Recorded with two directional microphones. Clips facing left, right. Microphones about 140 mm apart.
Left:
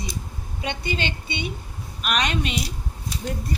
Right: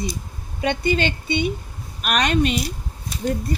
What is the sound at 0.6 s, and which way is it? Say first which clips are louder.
A woman's voice: right 7 dB; 50° right (ahead or behind).